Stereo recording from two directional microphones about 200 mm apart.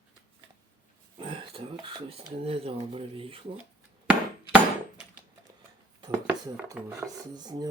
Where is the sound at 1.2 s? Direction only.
25° right (ahead or behind).